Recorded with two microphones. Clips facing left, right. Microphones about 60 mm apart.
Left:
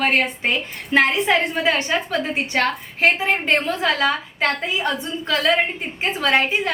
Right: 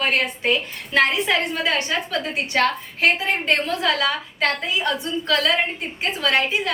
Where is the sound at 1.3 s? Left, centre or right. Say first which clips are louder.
Left 3 dB; left.